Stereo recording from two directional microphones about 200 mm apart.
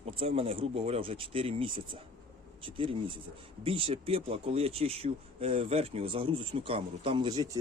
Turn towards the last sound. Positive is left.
turn(degrees=-20)  # may be behind; listen again after turning